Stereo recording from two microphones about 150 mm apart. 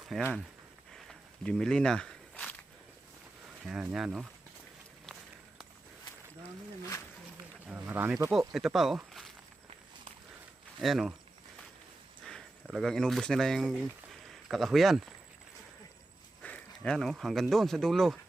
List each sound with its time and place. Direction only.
0.1 s speech: centre (ahead or behind)
0.9 s walk: 5° left (ahead or behind)
3.7 s speech: 5° right (ahead or behind)
5.1 s run: 5° left (ahead or behind)
7.7 s speech: 10° right (ahead or behind)
8.3 s speech: centre (ahead or behind)
10.8 s speech: centre (ahead or behind)
12.2 s speech: centre (ahead or behind)
14.1 s a sound: centre (ahead or behind)
16.4 s speech: 10° left (ahead or behind)